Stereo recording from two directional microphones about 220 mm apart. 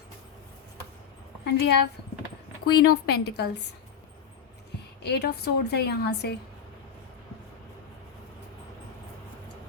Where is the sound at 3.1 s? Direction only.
45° left (ahead or behind).